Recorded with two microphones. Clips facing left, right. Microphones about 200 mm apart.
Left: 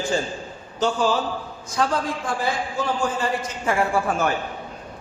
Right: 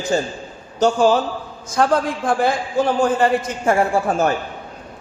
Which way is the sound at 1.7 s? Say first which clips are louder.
Right 6 dB; 55° right (ahead or behind).